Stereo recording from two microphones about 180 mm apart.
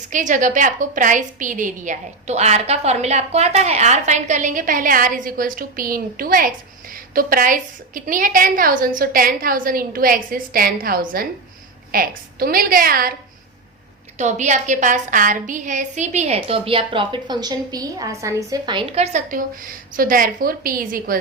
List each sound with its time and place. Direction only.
0.1 s a woman's voice: 45° right (ahead or behind)
14.2 s a woman's voice: 40° right (ahead or behind)